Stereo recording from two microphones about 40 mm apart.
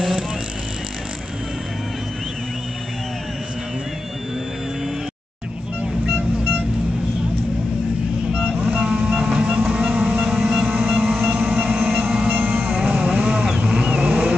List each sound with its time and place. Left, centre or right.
8.3 s vehicle: right
9.2 s train: right
11.2 s music: right
11.9 s train: centre
12.2 s music: right
12.6 s vehicle: right